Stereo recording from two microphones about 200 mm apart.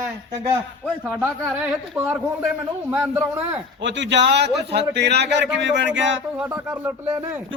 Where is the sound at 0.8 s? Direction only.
5° right (ahead or behind).